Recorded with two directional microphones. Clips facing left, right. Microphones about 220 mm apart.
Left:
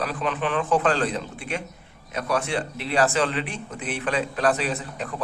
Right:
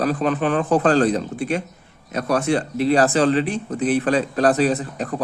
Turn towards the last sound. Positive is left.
turn(degrees=-40)  # may be behind; listen again after turning